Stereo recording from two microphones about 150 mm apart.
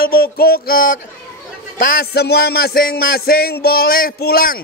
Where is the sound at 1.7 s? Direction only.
70° left (ahead or behind).